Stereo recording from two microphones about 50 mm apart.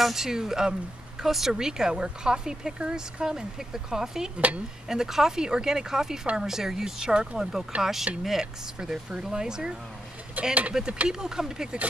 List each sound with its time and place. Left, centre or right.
0.0 s speech: centre
10.4 s speech: right
10.8 s speech: centre